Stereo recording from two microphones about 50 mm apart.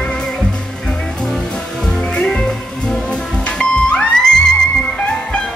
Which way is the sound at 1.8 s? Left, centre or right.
Centre.